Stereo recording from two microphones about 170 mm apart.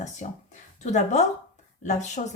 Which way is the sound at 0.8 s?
45° left (ahead or behind).